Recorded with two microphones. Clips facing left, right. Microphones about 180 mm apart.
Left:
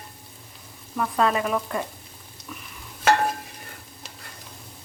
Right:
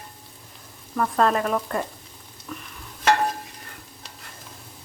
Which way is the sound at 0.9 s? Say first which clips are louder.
Right 2 dB; 5° left (ahead or behind).